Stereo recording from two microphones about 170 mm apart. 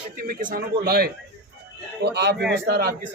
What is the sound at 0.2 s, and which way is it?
Speech, 55° right (ahead or behind).